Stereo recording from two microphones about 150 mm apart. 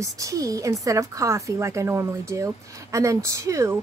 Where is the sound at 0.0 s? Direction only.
20° right (ahead or behind).